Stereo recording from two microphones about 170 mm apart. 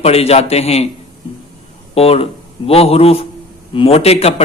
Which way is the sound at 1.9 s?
35° left (ahead or behind).